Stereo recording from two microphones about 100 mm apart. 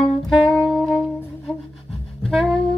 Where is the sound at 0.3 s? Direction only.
5° left (ahead or behind).